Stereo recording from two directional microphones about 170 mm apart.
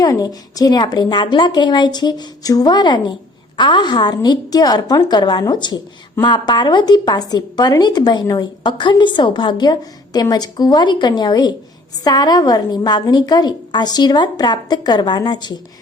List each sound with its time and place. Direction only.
0.0 s a woman's voice: 20° left (ahead or behind)